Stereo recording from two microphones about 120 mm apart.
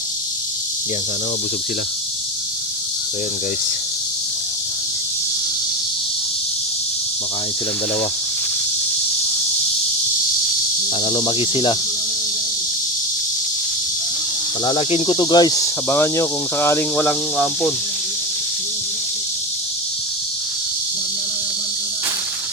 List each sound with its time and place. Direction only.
11.0 s cricket: 50° left (ahead or behind)
14.6 s speech: 35° left (ahead or behind)
14.8 s speech: 50° left (ahead or behind); by 15.7 s 30° left (ahead or behind)
15.9 s cricket: 20° left (ahead or behind)
17.0 s speech: 10° left (ahead or behind)